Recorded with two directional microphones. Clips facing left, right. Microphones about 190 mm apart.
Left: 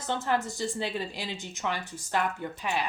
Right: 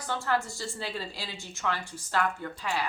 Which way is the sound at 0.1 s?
20° left (ahead or behind).